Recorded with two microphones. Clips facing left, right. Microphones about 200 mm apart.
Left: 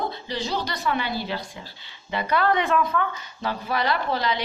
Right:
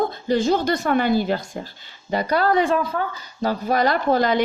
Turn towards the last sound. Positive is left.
turn(degrees=-50)  # may be behind; listen again after turning